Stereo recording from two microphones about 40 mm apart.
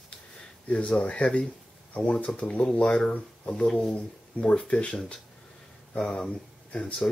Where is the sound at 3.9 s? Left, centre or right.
Left.